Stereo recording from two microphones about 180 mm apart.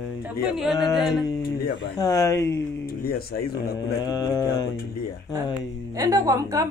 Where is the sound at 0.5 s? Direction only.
Centre (ahead or behind).